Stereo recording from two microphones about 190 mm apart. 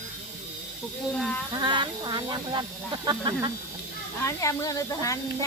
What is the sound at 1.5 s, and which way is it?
Speech, 25° right (ahead or behind).